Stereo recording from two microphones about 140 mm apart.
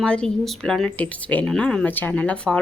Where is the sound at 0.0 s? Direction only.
5° left (ahead or behind).